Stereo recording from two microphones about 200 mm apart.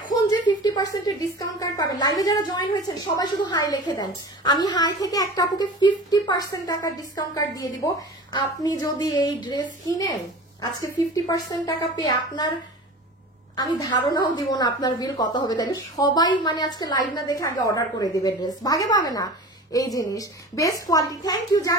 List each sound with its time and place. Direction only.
0.7 s a woman's voice: 20° left (ahead or behind)
13.6 s a woman's voice: 20° left (ahead or behind)